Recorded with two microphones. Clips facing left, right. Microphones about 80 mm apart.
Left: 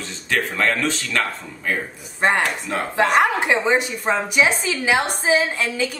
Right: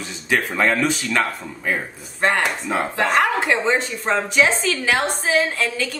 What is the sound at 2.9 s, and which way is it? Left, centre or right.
A woman's voice, centre.